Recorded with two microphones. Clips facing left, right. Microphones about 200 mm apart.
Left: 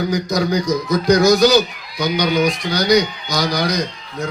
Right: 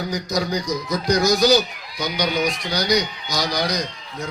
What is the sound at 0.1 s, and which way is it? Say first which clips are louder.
A man's voice: left 5 dB; 55° left (ahead or behind).